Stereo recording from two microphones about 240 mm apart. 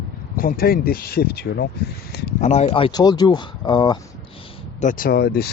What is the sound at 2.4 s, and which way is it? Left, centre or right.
Speech, left.